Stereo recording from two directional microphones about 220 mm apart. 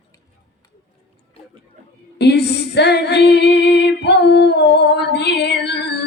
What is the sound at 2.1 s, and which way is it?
Female singing, 50° left (ahead or behind).